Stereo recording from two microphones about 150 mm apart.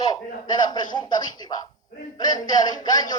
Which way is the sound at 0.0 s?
25° left (ahead or behind).